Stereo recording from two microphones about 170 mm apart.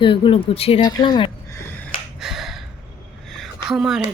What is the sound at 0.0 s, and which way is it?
Speech, 30° left (ahead or behind).